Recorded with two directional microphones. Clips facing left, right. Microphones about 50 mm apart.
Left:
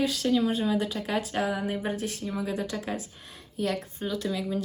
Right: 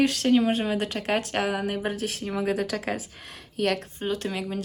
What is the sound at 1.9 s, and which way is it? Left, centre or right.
Speech, right.